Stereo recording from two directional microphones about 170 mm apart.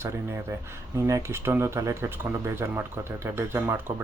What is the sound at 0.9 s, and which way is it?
Speech, 15° right (ahead or behind).